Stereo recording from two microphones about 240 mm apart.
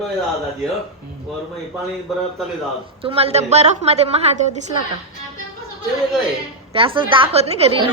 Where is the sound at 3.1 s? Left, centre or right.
Right.